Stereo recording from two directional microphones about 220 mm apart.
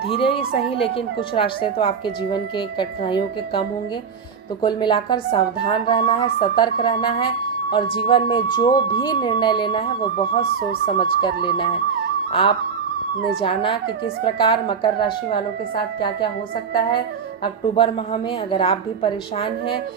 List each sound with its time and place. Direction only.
0.1 s a woman's voice: 25° left (ahead or behind)
4.6 s a woman's voice: 20° left (ahead or behind)
17.4 s a woman's voice: 25° left (ahead or behind)